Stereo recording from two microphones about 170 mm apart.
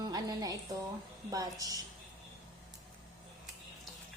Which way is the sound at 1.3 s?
20° right (ahead or behind).